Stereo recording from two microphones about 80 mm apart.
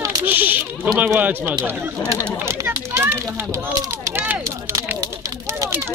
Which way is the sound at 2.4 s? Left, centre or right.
Right.